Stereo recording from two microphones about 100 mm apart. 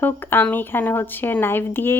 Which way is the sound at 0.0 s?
20° left (ahead or behind).